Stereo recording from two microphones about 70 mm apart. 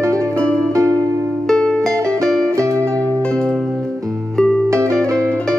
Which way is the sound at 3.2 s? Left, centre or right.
Centre.